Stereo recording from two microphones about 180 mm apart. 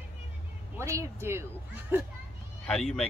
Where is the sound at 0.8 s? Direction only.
15° right (ahead or behind).